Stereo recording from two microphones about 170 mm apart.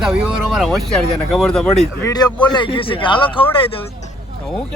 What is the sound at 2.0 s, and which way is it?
A man's voice, 25° left (ahead or behind).